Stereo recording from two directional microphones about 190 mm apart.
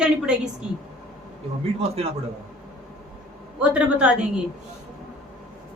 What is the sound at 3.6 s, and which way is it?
Speech, 5° right (ahead or behind).